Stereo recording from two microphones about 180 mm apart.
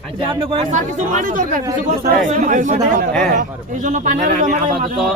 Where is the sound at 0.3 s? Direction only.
30° right (ahead or behind).